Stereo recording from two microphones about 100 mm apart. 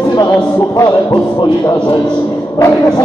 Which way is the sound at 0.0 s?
45° left (ahead or behind).